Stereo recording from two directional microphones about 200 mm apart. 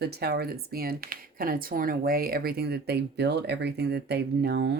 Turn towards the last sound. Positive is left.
turn(degrees=-55)  # may be behind; listen again after turning